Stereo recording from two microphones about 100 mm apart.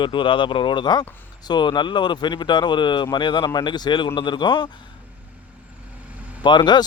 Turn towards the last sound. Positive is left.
turn(degrees=50)  # may be behind; listen again after turning